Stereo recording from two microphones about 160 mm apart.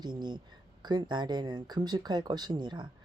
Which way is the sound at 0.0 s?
25° right (ahead or behind).